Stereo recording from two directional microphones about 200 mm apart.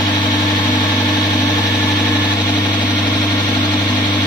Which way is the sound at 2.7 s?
20° left (ahead or behind).